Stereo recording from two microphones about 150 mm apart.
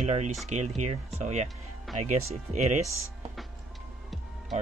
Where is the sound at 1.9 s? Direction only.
Centre (ahead or behind).